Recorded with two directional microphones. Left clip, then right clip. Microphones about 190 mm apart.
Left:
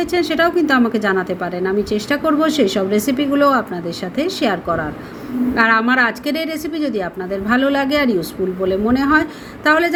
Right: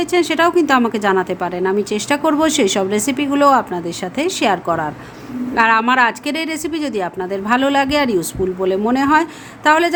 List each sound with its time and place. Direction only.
0.0 s a woman's voice: 15° right (ahead or behind)